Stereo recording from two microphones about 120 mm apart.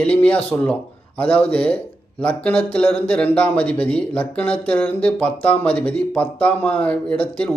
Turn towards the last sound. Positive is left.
turn(degrees=10)  # may be behind; listen again after turning